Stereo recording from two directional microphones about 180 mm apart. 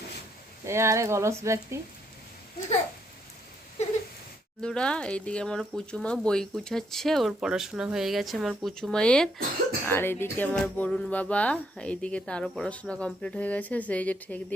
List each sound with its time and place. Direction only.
0.6 s speech: 15° right (ahead or behind)
3.8 s a sound: 40° left (ahead or behind)
4.6 s speech: 5° left (ahead or behind)